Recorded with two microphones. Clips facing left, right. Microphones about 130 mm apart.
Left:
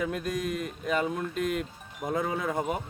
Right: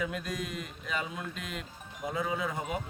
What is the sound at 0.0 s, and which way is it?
Speech, 45° left (ahead or behind).